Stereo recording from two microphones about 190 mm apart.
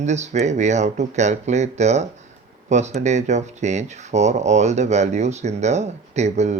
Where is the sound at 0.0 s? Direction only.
35° right (ahead or behind).